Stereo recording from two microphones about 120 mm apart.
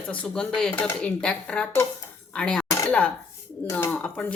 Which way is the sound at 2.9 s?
10° left (ahead or behind).